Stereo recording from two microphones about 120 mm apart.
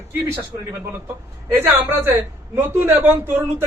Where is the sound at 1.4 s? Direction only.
15° right (ahead or behind).